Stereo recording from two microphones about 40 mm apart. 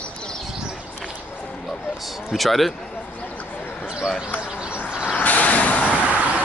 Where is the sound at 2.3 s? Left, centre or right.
Centre.